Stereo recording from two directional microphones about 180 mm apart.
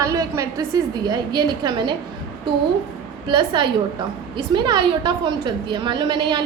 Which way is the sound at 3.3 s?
25° right (ahead or behind).